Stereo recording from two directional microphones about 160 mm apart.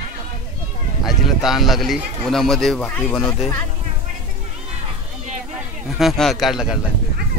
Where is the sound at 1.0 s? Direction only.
Centre (ahead or behind).